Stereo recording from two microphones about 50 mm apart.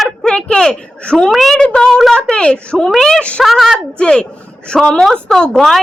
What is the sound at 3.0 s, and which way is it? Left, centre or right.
Speech, centre.